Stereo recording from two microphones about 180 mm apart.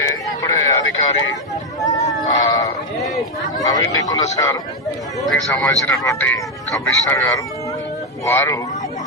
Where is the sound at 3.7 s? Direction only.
20° left (ahead or behind).